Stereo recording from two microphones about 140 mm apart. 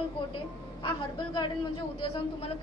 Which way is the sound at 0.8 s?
35° left (ahead or behind).